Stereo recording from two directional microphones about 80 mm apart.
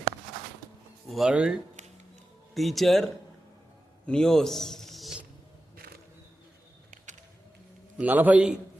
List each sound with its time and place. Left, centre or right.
1.1 s speech: centre
2.6 s a man's voice: centre
7.9 s a man's voice: right